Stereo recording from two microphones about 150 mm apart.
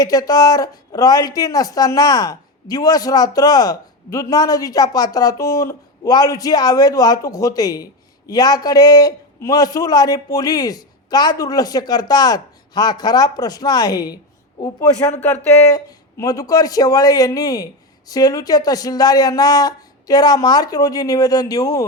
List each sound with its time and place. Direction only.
0.0 s speech: 25° left (ahead or behind)
15.7 s speech: 25° left (ahead or behind)